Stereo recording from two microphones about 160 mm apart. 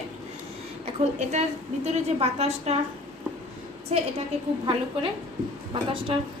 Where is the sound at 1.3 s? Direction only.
45° right (ahead or behind).